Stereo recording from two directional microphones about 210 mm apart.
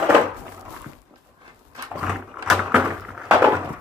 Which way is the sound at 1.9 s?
5° right (ahead or behind).